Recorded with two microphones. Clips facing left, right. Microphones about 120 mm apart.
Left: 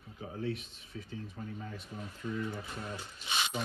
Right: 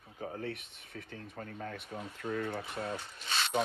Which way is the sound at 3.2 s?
15° left (ahead or behind).